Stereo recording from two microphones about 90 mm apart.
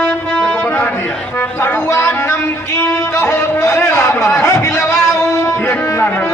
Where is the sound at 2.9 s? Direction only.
35° left (ahead or behind).